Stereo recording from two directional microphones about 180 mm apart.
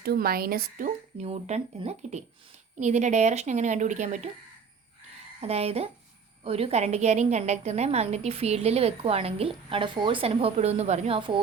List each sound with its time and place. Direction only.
0.0 s a woman's voice: 60° right (ahead or behind); by 4.3 s 40° right (ahead or behind)
5.4 s a woman's voice: 35° right (ahead or behind)